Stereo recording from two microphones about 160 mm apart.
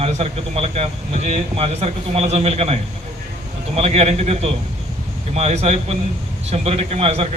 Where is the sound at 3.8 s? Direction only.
40° right (ahead or behind).